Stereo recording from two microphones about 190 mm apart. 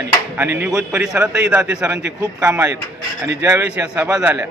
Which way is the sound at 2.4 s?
15° right (ahead or behind).